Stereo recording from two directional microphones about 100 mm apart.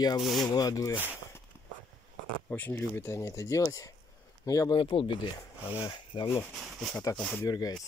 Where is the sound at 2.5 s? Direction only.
20° left (ahead or behind); by 4.7 s 35° left (ahead or behind).